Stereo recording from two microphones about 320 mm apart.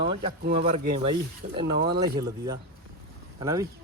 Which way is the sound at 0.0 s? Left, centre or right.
Right.